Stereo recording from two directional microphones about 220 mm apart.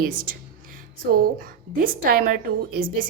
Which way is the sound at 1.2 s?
40° right (ahead or behind).